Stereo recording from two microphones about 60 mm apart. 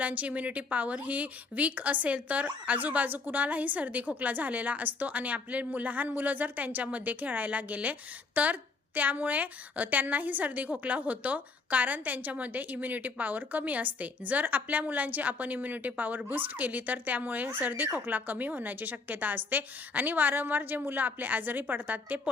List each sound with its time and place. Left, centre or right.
0.0 s a woman's voice: right